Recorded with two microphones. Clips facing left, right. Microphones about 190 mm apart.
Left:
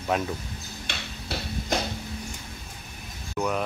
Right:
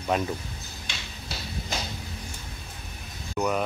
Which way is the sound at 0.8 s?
60° left (ahead or behind).